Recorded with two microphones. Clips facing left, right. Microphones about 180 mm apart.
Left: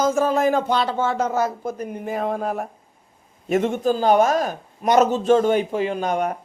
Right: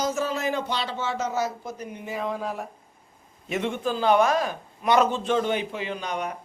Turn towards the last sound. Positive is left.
turn(degrees=50)  # may be behind; listen again after turning